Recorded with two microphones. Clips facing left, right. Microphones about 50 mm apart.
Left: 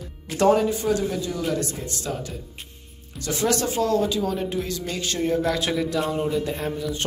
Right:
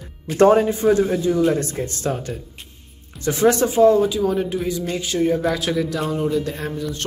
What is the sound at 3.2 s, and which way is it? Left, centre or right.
Speech, right.